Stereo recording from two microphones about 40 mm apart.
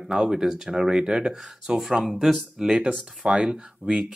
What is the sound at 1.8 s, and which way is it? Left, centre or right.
Speech, centre.